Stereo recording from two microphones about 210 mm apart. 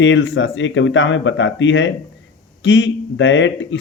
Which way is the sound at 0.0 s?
60° left (ahead or behind).